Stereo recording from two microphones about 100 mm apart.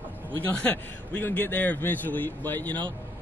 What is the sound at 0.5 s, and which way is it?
A man's voice, 15° left (ahead or behind).